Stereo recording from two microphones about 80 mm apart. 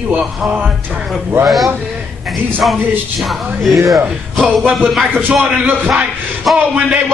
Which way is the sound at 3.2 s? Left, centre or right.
Centre.